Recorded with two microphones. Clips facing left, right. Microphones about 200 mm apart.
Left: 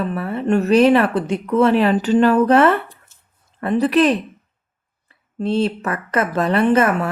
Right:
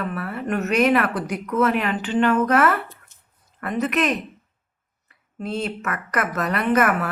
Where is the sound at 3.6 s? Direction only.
30° left (ahead or behind).